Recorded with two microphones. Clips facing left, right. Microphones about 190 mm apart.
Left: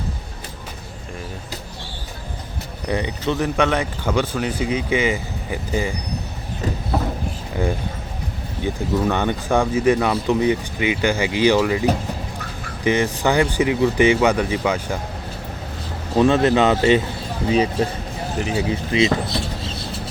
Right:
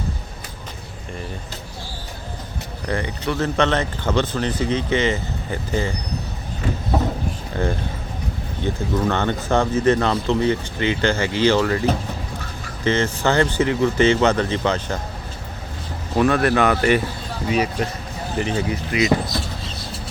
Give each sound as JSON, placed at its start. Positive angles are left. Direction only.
{"t": 2.8, "sound": "speech", "side_deg": 20}
{"t": 7.5, "sound": "speech", "side_deg": 10}
{"t": 16.1, "sound": "speech", "side_deg": 20}
{"t": 18.3, "sound": "speech", "side_deg": 5}
{"t": 18.7, "sound": "speech", "side_deg": 25}